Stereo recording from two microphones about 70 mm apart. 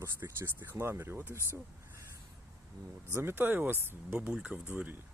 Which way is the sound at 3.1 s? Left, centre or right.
Right.